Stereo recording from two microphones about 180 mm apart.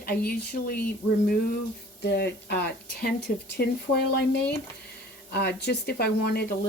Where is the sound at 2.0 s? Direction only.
65° left (ahead or behind).